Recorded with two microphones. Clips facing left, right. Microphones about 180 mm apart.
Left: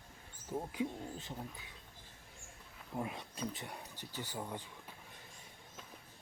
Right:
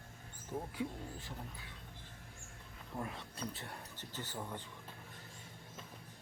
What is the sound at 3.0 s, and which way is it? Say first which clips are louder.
Speech: left 3 dB; 15° left (ahead or behind).